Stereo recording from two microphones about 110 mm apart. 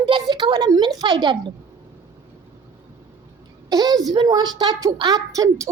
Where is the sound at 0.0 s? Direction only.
50° right (ahead or behind).